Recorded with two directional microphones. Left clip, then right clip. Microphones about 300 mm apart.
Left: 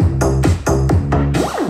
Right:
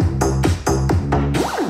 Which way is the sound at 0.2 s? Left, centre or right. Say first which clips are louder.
Left 2 dB; centre.